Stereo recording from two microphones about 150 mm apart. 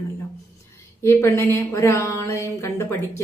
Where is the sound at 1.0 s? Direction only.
15° left (ahead or behind).